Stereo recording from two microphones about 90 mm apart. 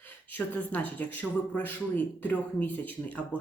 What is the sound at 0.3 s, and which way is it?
Speech, 15° left (ahead or behind).